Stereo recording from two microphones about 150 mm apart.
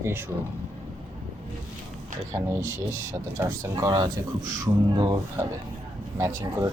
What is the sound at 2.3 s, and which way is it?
Speech, 20° right (ahead or behind).